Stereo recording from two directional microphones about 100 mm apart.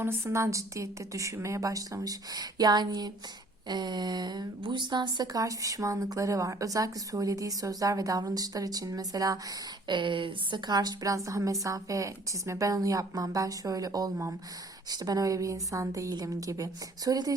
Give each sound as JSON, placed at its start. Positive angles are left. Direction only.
{"t": 0.0, "sound": "speech", "side_deg": -25}
{"t": 9.8, "sound": "speech", "side_deg": -55}